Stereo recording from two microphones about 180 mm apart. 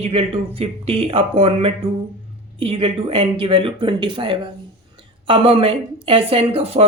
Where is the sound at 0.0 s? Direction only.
35° right (ahead or behind).